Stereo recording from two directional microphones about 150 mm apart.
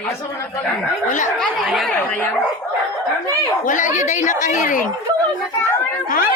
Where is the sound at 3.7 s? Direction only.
55° left (ahead or behind).